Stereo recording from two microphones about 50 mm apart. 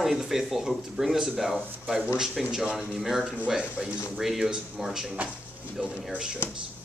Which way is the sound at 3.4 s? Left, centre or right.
Centre.